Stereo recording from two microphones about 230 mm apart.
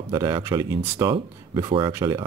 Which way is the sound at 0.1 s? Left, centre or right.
Centre.